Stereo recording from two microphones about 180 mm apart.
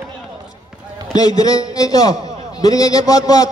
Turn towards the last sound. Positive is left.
turn(degrees=20)  # may be behind; listen again after turning